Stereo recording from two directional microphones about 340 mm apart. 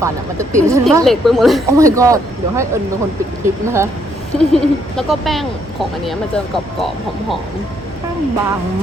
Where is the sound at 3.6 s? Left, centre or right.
Centre.